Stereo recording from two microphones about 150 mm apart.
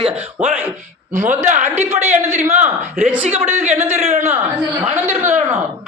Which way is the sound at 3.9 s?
50° right (ahead or behind).